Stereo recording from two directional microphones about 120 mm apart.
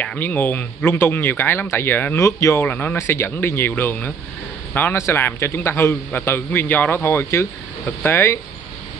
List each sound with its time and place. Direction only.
0.0 s a man's voice: 15° left (ahead or behind)